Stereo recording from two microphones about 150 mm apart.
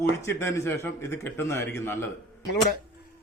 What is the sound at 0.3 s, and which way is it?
Speech, 20° left (ahead or behind).